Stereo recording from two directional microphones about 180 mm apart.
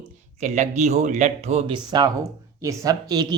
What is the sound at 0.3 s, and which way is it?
Speech, 40° right (ahead or behind).